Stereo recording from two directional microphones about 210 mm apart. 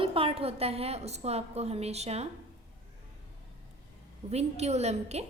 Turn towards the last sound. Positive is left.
turn(degrees=-30)  # may be behind; listen again after turning